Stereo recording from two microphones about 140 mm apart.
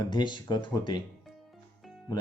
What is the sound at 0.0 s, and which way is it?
Speech, 30° left (ahead or behind).